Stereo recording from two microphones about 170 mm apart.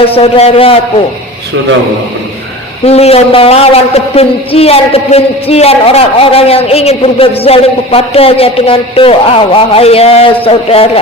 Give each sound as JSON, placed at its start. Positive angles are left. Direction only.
{"t": 0.0, "sound": "a man's voice", "side_deg": 35}
{"t": 2.8, "sound": "a man's voice", "side_deg": 35}